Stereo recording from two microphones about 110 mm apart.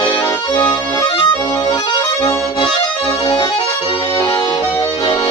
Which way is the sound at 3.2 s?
45° left (ahead or behind).